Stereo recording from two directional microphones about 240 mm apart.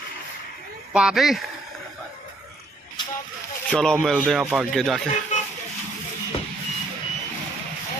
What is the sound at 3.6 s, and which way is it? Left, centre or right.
Speech, centre.